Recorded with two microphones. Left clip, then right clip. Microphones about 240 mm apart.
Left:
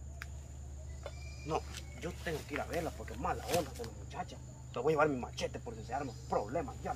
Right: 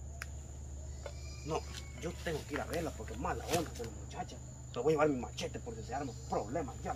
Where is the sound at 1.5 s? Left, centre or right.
Centre.